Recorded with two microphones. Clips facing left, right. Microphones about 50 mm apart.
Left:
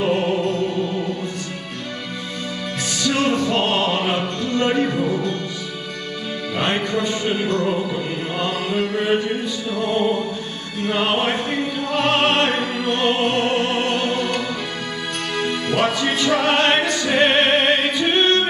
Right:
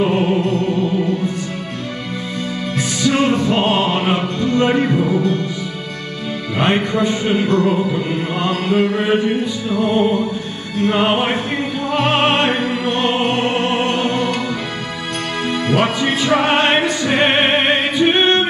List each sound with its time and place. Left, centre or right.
0.0 s music: centre
3.0 s music: centre
6.6 s music: centre
15.4 s music: centre
16.0 s music: centre